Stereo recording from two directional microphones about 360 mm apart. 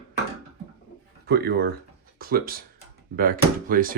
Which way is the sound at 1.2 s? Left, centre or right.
Right.